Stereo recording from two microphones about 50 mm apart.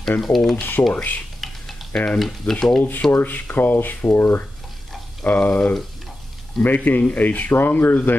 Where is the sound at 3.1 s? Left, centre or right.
Left.